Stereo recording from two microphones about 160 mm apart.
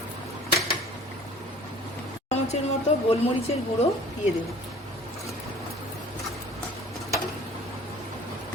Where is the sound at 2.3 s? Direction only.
45° left (ahead or behind).